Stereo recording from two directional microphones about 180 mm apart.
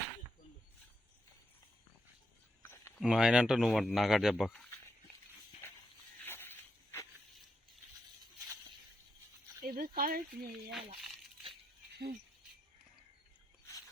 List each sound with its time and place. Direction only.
3.0 s speech: 5° right (ahead or behind)
6.2 s a sound: 10° left (ahead or behind)
9.6 s speech: 50° right (ahead or behind)
10.7 s speech: centre (ahead or behind)